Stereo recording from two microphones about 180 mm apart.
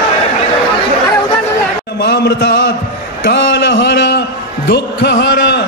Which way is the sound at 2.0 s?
70° left (ahead or behind).